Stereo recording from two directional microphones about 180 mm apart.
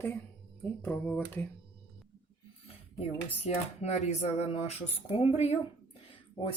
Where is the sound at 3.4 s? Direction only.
35° left (ahead or behind).